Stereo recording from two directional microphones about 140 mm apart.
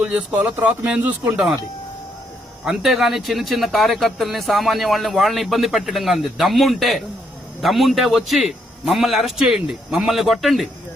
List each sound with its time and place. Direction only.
0.0 s speech: 10° right (ahead or behind)
2.6 s speech: centre (ahead or behind)